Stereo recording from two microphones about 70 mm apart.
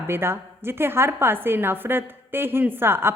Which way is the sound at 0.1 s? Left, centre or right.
Right.